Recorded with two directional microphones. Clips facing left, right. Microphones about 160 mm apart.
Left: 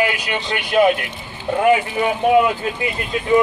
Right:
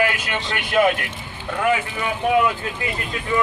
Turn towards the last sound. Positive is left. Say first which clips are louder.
# left 6 dB
turn(degrees=25)  # may be behind; listen again after turning